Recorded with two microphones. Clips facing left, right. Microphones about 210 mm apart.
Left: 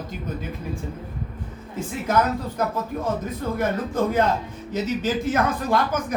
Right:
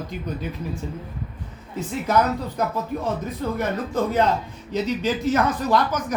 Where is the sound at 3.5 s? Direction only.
50° left (ahead or behind).